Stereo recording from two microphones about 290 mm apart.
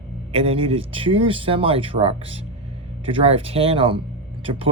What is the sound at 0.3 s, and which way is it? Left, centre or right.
Speech, centre.